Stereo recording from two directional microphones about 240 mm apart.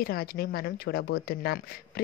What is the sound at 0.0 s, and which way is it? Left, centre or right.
Speech, left.